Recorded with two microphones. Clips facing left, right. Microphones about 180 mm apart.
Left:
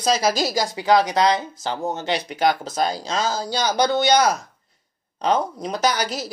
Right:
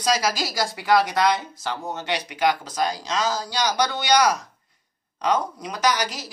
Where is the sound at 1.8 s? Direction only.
30° left (ahead or behind).